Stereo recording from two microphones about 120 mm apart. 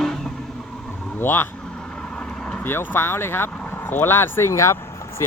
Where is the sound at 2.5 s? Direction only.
20° left (ahead or behind).